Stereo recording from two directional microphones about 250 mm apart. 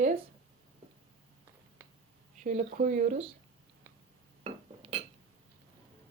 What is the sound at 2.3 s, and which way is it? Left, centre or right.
Speech, right.